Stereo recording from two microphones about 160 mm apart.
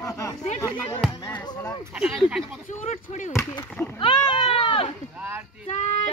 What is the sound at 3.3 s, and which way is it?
Speech, 15° left (ahead or behind).